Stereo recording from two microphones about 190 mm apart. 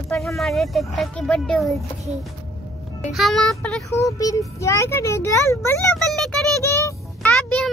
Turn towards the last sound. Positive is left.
turn(degrees=5)  # may be behind; listen again after turning